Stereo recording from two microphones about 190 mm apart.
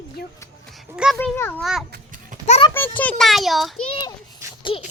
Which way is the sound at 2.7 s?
10° left (ahead or behind).